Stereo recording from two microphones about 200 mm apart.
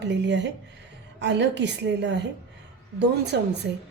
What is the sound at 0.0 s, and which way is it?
A woman's voice, 60° right (ahead or behind).